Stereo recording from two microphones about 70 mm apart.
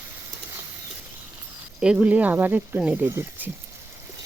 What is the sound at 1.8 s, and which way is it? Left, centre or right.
Speech, centre.